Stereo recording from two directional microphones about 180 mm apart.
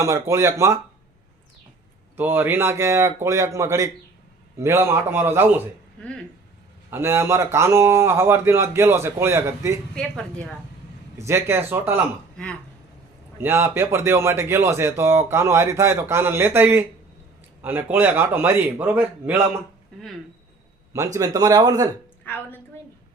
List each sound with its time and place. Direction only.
0.0 s speech: 15° right (ahead or behind)
2.1 s speech: 10° right (ahead or behind)
6.9 s speech: 15° right (ahead or behind)
9.9 s a woman's voice: 5° left (ahead or behind)
11.2 s speech: 15° right (ahead or behind)
13.4 s speech: 15° right (ahead or behind)
20.9 s speech: 20° right (ahead or behind)
22.2 s a woman's voice: 10° left (ahead or behind)